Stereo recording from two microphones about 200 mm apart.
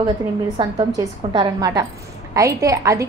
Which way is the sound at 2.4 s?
15° right (ahead or behind).